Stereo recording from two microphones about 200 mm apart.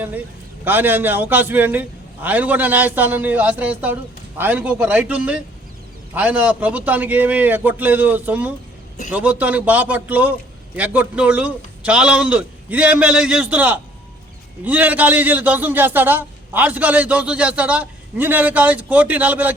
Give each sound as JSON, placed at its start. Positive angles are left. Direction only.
{"t": 0.6, "sound": "a man's voice", "side_deg": -10}